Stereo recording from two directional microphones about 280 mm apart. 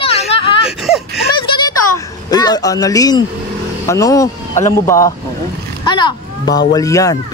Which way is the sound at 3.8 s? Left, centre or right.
Centre.